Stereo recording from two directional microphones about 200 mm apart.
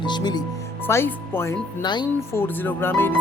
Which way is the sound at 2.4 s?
10° left (ahead or behind).